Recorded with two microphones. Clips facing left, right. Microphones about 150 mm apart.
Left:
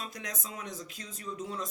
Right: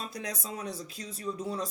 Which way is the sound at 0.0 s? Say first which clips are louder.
Right 3 dB; 30° right (ahead or behind).